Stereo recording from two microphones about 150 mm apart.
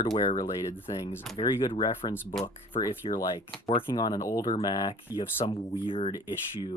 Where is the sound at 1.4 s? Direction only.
30° left (ahead or behind).